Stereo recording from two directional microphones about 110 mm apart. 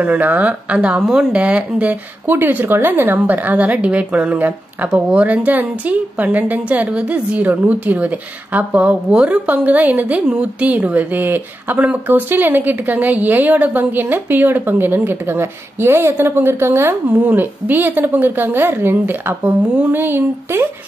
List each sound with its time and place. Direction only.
0.0 s speech: 15° right (ahead or behind)